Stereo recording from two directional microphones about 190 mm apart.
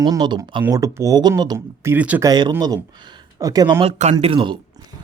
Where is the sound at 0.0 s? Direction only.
20° right (ahead or behind).